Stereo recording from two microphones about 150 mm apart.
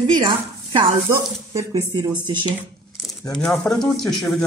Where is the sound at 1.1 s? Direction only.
20° right (ahead or behind).